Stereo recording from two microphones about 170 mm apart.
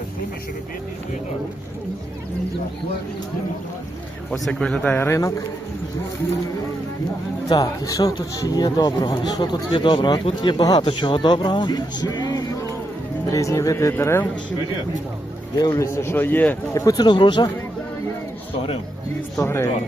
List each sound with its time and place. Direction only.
4.3 s a man's voice: 5° left (ahead or behind)
7.4 s a man's voice: 20° left (ahead or behind)
15.6 s speech: 15° left (ahead or behind)
19.4 s a man's voice: 15° left (ahead or behind)